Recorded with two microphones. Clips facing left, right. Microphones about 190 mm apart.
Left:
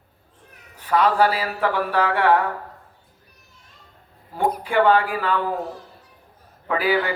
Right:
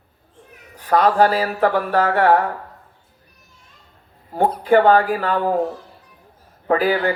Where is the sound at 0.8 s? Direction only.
45° right (ahead or behind).